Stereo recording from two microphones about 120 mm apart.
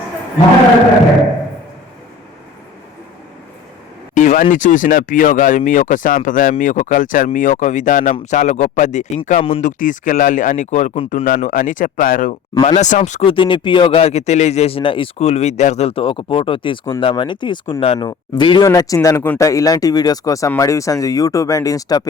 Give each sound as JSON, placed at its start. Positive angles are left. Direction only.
{"t": 4.1, "sound": "speech", "side_deg": 90}
{"t": 11.1, "sound": "speech", "side_deg": 75}
{"t": 12.6, "sound": "speech", "side_deg": 70}
{"t": 13.2, "sound": "speech", "side_deg": 45}
{"t": 18.6, "sound": "speech", "side_deg": 30}